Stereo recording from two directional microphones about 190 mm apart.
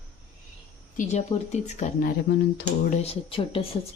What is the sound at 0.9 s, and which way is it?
Speech, 35° left (ahead or behind).